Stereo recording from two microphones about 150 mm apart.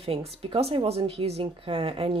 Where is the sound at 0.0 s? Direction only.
40° right (ahead or behind).